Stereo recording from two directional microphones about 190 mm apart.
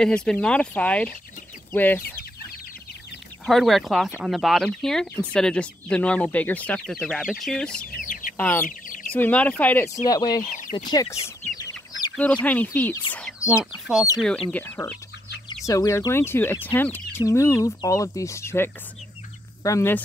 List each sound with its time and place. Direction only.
0.0 s speech: 5° left (ahead or behind)
3.4 s speech: centre (ahead or behind)
8.1 s chicken: 45° left (ahead or behind)
8.4 s speech: 10° left (ahead or behind)
8.6 s chicken: 45° left (ahead or behind)
9.0 s speech: 10° left (ahead or behind)
10.0 s speech: 20° left (ahead or behind)
11.2 s chicken: 15° left (ahead or behind)
12.2 s speech: 5° left (ahead or behind)
13.1 s bird: 10° left (ahead or behind)
13.7 s speech: 5° right (ahead or behind)
14.5 s speech: 10° left (ahead or behind)